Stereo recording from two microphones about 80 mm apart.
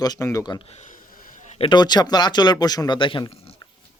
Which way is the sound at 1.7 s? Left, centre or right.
Left.